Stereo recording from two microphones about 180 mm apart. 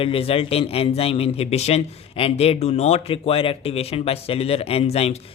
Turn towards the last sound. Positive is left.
turn(degrees=35)  # may be behind; listen again after turning